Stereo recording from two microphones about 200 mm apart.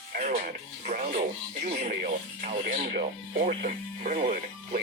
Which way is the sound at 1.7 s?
40° right (ahead or behind).